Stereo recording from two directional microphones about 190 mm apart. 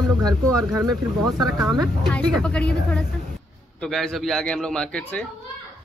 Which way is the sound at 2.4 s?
5° left (ahead or behind).